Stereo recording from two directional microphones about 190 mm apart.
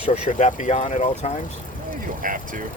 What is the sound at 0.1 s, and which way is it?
Speech, 40° left (ahead or behind).